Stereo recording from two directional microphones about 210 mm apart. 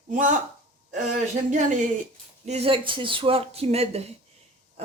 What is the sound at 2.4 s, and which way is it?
Speech, 30° right (ahead or behind).